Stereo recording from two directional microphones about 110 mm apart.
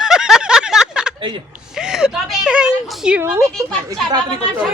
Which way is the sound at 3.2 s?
25° right (ahead or behind).